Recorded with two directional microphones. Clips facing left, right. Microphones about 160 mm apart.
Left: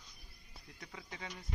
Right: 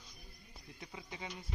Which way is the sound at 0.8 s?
20° right (ahead or behind).